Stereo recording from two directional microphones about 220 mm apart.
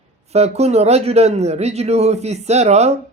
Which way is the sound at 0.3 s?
30° right (ahead or behind).